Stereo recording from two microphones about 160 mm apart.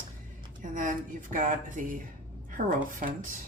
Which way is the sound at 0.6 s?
55° right (ahead or behind).